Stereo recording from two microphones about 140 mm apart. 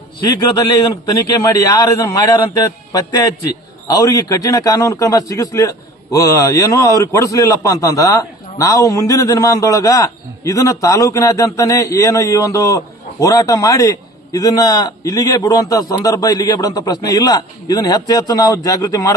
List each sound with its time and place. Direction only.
1.5 s a man's voice: 20° left (ahead or behind)